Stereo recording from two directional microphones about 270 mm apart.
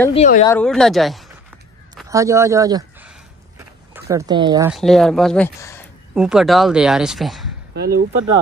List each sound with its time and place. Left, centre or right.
0.1 s speech: left
0.5 s speech: centre
2.0 s speech: centre
4.6 s speech: centre
6.1 s speech: centre
7.7 s speech: right